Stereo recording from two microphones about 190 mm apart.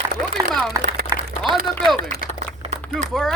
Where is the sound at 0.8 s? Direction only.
45° right (ahead or behind).